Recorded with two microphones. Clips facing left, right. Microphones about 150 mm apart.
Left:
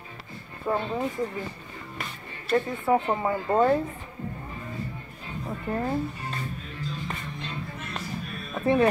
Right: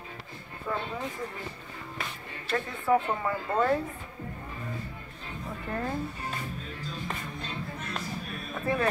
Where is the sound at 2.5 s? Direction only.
25° left (ahead or behind).